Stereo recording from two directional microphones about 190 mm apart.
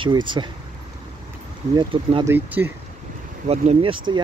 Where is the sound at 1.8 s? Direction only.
25° right (ahead or behind).